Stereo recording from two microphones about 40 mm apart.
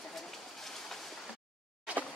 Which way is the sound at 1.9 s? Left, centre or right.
Right.